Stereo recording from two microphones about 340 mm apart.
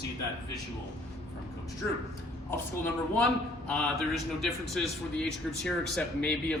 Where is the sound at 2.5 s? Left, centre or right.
Centre.